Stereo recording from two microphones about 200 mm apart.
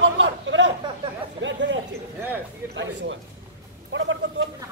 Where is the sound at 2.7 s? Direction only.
65° right (ahead or behind).